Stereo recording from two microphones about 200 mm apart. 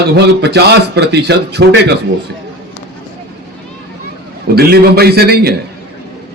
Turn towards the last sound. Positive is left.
turn(degrees=-50)  # may be behind; listen again after turning